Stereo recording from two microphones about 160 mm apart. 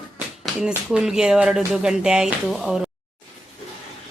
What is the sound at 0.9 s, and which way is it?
Speech, 5° right (ahead or behind).